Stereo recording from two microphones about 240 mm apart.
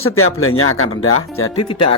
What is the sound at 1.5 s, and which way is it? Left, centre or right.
Speech, left.